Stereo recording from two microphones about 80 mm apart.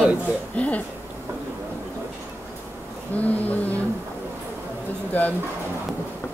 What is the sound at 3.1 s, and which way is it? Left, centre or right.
Speech, left.